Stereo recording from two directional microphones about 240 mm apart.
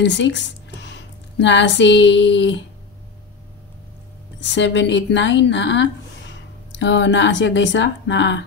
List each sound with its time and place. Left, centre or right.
0.0 s speech: left
4.4 s speech: left